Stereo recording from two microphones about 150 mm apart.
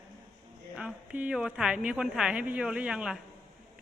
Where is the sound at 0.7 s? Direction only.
10° right (ahead or behind).